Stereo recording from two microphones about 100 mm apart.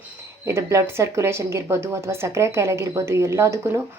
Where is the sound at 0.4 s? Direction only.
30° right (ahead or behind).